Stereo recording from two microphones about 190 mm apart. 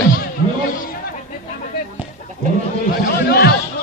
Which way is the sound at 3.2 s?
60° left (ahead or behind).